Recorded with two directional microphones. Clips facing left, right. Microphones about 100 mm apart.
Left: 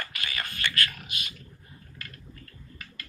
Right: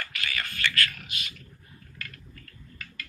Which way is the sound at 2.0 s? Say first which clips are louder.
Right 2 dB; 30° left (ahead or behind).